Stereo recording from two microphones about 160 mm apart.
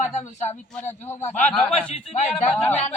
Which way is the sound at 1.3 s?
50° left (ahead or behind).